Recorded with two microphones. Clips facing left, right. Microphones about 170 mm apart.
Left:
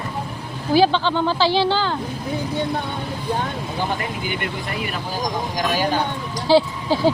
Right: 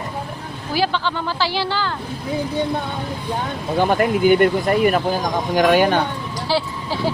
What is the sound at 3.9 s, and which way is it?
Speech, 50° right (ahead or behind).